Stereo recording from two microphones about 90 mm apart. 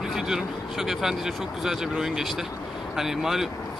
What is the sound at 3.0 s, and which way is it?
Speech, 5° right (ahead or behind).